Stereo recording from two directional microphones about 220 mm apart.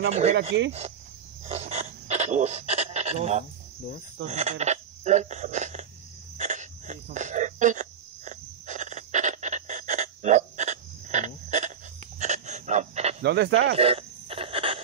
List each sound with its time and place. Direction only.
0.3 s speech: 55° right (ahead or behind)
0.7 s speech: 30° right (ahead or behind)
1.4 s pant: 30° right (ahead or behind)
4.3 s speech: 30° right (ahead or behind)
6.3 s a sound: 35° right (ahead or behind)
13.2 s speech: 50° right (ahead or behind)
13.7 s a sound: 25° right (ahead or behind)